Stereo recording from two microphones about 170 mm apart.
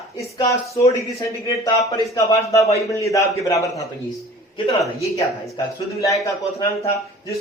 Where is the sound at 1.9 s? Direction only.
20° left (ahead or behind).